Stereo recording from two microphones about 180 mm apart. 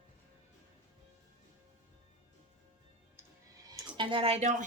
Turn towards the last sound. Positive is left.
turn(degrees=-40)  # may be behind; listen again after turning